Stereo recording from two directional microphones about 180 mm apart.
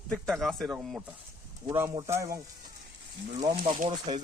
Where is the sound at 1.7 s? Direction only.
15° right (ahead or behind).